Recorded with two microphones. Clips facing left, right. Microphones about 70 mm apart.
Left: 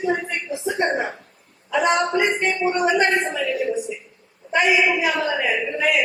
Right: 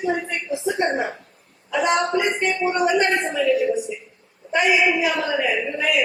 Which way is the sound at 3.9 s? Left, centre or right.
Left.